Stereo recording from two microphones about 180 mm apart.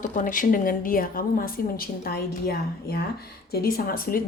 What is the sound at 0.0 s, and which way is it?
A woman's voice, 45° left (ahead or behind).